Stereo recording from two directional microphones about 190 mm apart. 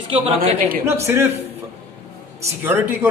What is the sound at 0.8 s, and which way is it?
Speech, 15° right (ahead or behind).